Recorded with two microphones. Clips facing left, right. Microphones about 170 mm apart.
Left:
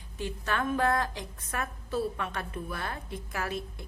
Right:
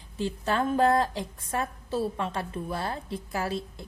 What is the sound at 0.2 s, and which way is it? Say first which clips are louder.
A woman's voice: right 4 dB; 30° right (ahead or behind).